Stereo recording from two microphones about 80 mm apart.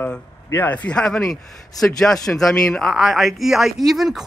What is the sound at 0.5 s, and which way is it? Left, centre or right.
A man's voice, left.